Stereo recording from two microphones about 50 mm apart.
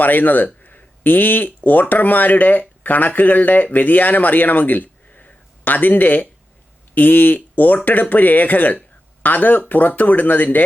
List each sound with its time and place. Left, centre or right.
0.0 s speech: left